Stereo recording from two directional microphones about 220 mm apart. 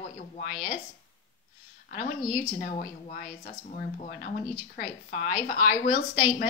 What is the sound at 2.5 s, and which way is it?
A woman's voice, 40° left (ahead or behind).